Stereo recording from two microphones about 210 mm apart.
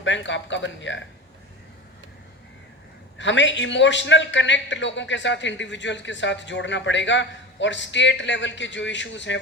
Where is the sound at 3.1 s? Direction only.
60° left (ahead or behind).